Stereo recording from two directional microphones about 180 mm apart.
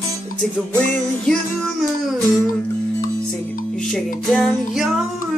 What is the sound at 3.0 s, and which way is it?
Music, 50° left (ahead or behind).